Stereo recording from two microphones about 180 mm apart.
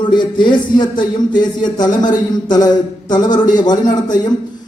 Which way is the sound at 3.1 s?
25° left (ahead or behind).